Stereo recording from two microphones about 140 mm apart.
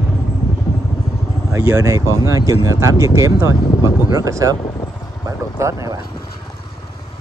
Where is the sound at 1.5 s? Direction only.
20° right (ahead or behind).